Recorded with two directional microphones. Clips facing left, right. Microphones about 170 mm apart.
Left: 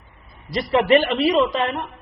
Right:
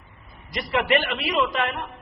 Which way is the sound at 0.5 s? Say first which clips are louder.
Left 6 dB; 35° left (ahead or behind).